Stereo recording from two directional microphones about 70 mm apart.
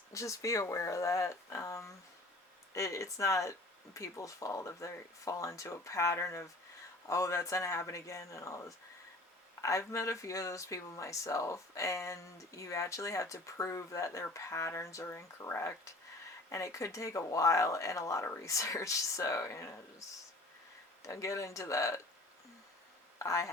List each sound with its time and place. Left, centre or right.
0.1 s speech: left
23.1 s speech: left